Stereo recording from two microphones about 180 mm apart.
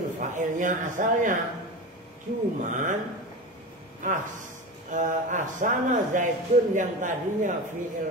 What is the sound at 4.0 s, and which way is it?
Speech, 45° right (ahead or behind).